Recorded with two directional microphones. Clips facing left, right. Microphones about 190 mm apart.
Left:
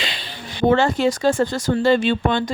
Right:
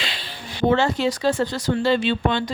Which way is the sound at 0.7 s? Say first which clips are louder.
Left 3 dB; 50° left (ahead or behind).